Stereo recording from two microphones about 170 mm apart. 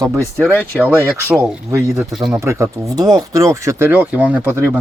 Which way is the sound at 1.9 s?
Centre (ahead or behind).